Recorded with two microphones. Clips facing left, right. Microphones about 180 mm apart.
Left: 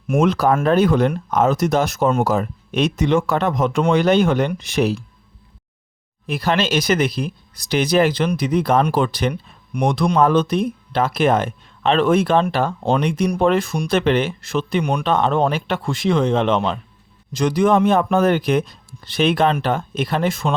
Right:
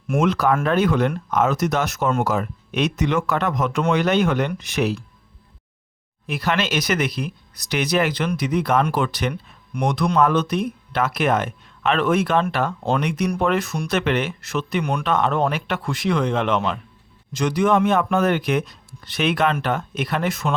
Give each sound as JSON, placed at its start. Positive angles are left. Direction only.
{"t": 0.2, "sound": "speech", "side_deg": 35}
{"t": 6.2, "sound": "speech", "side_deg": 35}